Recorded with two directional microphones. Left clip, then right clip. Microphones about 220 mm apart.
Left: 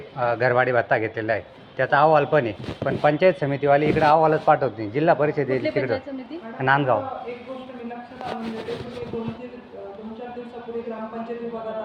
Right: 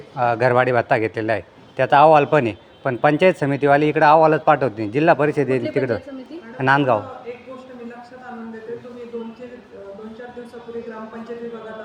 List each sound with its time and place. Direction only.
0.2 s speech: 60° right (ahead or behind)